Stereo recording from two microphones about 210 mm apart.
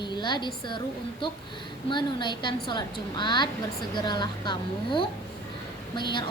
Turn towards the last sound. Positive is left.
turn(degrees=20)  # may be behind; listen again after turning